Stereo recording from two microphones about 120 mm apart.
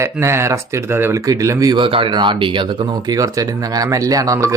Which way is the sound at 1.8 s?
45° right (ahead or behind).